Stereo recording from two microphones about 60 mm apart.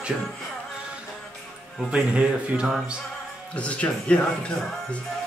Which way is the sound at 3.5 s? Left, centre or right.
Left.